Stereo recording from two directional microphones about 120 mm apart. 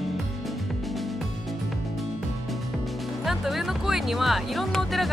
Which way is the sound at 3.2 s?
Centre (ahead or behind).